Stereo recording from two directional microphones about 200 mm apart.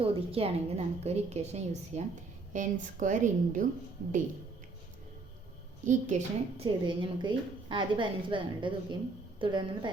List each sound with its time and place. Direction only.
0.0 s a woman's voice: 30° right (ahead or behind)
5.8 s a woman's voice: 35° right (ahead or behind)
6.8 s a woman's voice: 25° right (ahead or behind)